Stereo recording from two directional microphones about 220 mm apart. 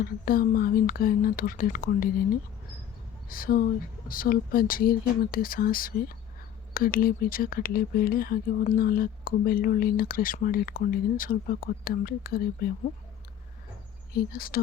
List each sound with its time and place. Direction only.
0.0 s speech: 40° left (ahead or behind)
14.1 s speech: 40° left (ahead or behind)